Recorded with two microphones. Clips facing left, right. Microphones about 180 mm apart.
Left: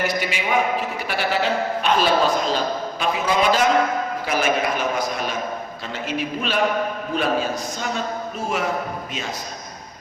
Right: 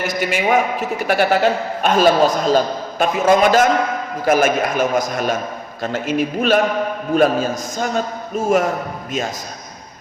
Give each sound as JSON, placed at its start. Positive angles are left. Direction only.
{"t": 0.2, "sound": "a man's voice", "side_deg": -50}